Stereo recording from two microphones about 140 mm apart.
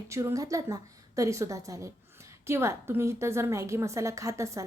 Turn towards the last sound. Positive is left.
turn(degrees=-20)  # may be behind; listen again after turning